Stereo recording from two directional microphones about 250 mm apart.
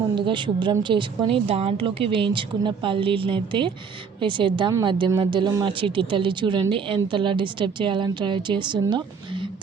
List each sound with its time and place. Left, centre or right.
0.2 s speech: centre